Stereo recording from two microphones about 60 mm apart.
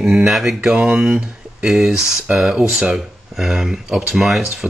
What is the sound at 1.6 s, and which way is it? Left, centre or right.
Speech, centre.